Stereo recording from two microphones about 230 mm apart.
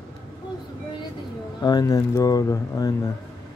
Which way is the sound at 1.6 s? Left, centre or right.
Centre.